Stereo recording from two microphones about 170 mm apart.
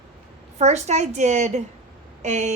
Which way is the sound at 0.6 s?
40° right (ahead or behind).